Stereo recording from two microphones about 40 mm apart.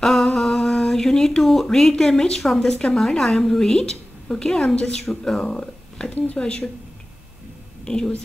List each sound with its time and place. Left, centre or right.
0.0 s a sound: centre
0.6 s mantra: centre
1.4 s speech: centre
4.7 s speech: left
7.8 s speech: centre